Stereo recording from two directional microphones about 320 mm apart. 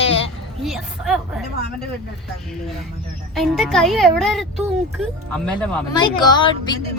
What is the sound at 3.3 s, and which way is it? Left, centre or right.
Speech, centre.